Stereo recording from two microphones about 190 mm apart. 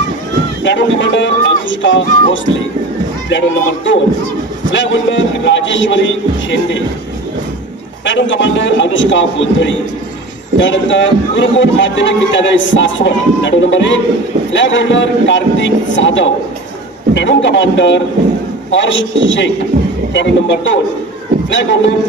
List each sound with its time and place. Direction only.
0.7 s a man's voice: 70° left (ahead or behind)
8.0 s a man's voice: 75° left (ahead or behind)